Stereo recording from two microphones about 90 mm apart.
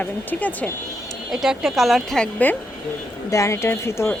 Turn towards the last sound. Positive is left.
turn(degrees=30)  # may be behind; listen again after turning